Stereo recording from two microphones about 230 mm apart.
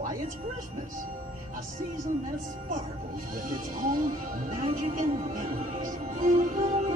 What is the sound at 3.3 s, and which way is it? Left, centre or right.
Speech, right.